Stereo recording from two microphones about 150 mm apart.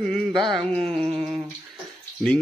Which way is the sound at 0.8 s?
40° right (ahead or behind).